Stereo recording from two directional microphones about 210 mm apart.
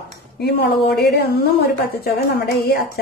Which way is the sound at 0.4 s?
50° left (ahead or behind).